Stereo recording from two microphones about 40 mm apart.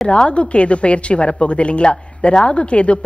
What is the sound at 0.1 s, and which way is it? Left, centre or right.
Speech, left.